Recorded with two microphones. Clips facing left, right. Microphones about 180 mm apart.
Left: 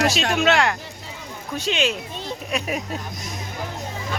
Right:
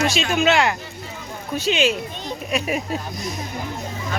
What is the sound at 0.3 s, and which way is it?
Speech, centre (ahead or behind).